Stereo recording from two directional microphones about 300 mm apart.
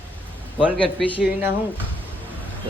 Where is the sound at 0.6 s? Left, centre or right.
Centre.